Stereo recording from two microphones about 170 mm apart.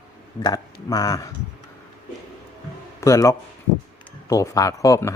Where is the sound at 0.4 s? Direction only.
20° left (ahead or behind).